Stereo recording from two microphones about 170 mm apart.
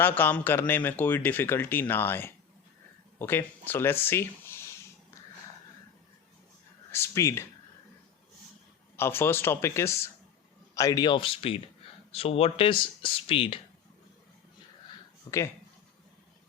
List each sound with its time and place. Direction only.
0.0 s speech: 10° left (ahead or behind)
6.9 s speech: 15° left (ahead or behind)
9.0 s speech: 15° left (ahead or behind); by 13.6 s 30° left (ahead or behind)
14.8 s a sound: 20° left (ahead or behind)